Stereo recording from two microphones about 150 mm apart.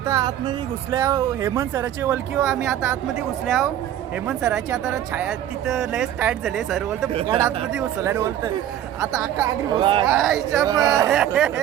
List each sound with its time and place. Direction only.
0.0 s speech: 25° right (ahead or behind); by 7.1 s centre (ahead or behind)
7.1 s speech: 40° right (ahead or behind)
7.4 s speech: 5° right (ahead or behind)
8.0 s speech: 15° right (ahead or behind)
9.7 s speech: 35° right (ahead or behind)
10.1 s speech: centre (ahead or behind)
10.6 s speech: 25° right (ahead or behind)
11.1 s speech: 5° right (ahead or behind)